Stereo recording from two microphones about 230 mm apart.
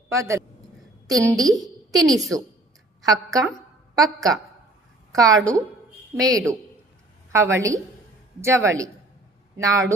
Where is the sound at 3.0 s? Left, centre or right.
Centre.